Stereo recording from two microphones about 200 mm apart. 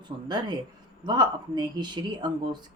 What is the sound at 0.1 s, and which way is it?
Speech, 30° right (ahead or behind).